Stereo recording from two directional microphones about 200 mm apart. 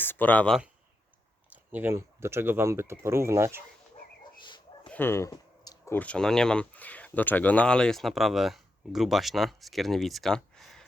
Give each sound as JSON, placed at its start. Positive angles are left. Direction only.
{"t": 0.0, "sound": "speech", "side_deg": 10}
{"t": 1.7, "sound": "speech", "side_deg": -10}
{"t": 4.4, "sound": "dog", "side_deg": 25}
{"t": 4.9, "sound": "speech", "side_deg": 10}